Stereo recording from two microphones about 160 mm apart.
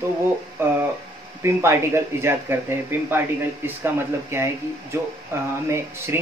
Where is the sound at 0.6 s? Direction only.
15° right (ahead or behind).